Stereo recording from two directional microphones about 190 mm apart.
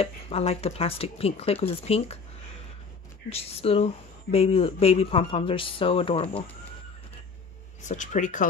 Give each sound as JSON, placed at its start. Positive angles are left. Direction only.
{"t": 0.0, "sound": "speech", "side_deg": 30}
{"t": 3.3, "sound": "speech", "side_deg": 30}
{"t": 7.8, "sound": "speech", "side_deg": 40}